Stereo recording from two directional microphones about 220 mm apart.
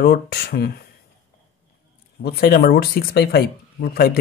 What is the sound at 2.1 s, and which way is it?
Speech, 45° left (ahead or behind).